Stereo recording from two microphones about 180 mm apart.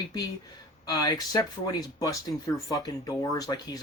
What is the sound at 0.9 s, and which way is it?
Speech, 20° left (ahead or behind).